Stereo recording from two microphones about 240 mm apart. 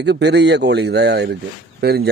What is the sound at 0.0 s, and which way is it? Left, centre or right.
Speech, right.